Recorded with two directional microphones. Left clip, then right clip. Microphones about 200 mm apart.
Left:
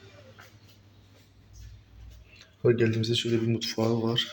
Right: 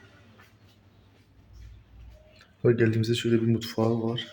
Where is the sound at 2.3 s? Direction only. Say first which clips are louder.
Right 1 dB; 25° right (ahead or behind).